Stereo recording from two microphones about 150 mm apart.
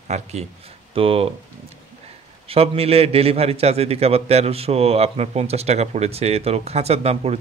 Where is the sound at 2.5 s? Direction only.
40° right (ahead or behind).